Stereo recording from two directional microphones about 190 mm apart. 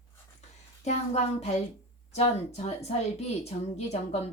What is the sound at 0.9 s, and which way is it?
A woman's voice, 35° left (ahead or behind).